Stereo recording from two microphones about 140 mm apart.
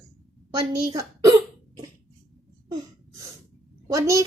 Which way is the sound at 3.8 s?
20° right (ahead or behind).